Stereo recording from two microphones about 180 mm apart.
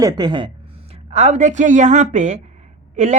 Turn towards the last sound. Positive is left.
turn(degrees=-40)  # may be behind; listen again after turning